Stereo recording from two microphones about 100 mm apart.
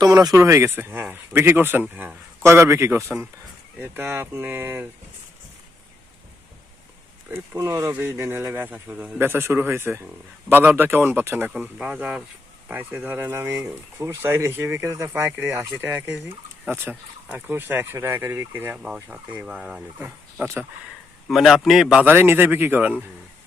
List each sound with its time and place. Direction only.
0.0 s speech: 40° right (ahead or behind)
0.4 s speech: 25° right (ahead or behind)
7.3 s speech: 30° right (ahead or behind)
7.9 s speech: 20° right (ahead or behind)
11.6 s speech: 10° right (ahead or behind)
20.4 s speech: 25° right (ahead or behind)
21.2 s a man's voice: centre (ahead or behind)
22.0 s speech: 20° right (ahead or behind)